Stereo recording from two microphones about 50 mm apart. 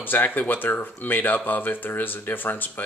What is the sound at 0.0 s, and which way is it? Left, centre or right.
Speech, left.